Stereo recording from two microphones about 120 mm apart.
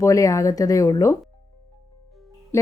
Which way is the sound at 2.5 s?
20° left (ahead or behind).